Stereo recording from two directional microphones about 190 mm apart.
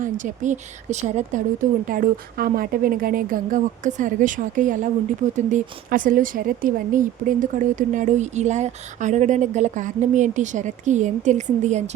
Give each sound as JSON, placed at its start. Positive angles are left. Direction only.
{"t": 0.0, "sound": "a woman's voice", "side_deg": -45}